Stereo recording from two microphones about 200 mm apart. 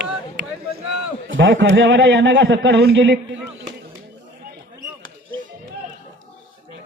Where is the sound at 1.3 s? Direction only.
70° right (ahead or behind).